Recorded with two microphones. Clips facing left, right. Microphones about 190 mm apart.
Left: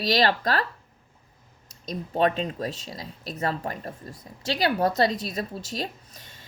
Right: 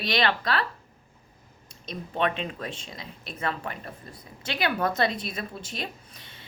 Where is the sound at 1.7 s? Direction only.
40° left (ahead or behind).